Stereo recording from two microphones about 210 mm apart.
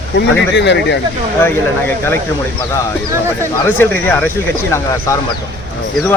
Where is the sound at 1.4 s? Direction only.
10° left (ahead or behind).